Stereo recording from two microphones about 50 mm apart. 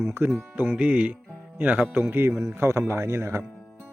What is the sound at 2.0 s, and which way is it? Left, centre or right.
Speech, right.